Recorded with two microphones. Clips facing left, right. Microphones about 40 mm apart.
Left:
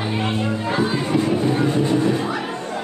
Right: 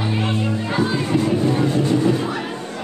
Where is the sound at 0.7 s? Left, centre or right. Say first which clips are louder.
Even; centre.